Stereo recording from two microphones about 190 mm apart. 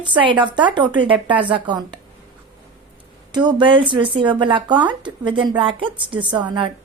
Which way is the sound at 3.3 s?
20° right (ahead or behind).